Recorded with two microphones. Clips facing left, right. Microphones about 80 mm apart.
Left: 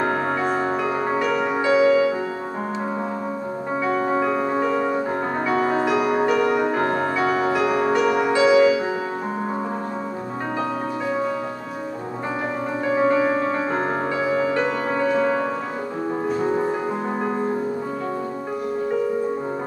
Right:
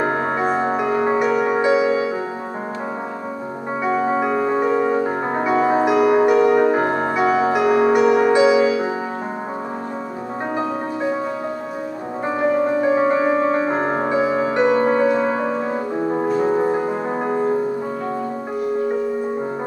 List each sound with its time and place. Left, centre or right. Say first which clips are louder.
0.0 s music: right 2 dB; right
3.8 s music: right 2 dB; centre
12.8 s music: left 2 dB; right